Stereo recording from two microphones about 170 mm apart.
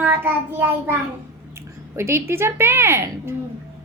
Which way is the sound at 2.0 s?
15° right (ahead or behind).